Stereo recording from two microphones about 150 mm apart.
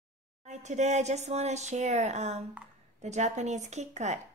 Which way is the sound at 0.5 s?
50° right (ahead or behind).